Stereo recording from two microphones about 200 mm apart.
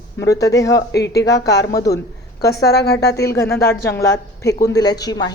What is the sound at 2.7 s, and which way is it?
Speech, 55° left (ahead or behind).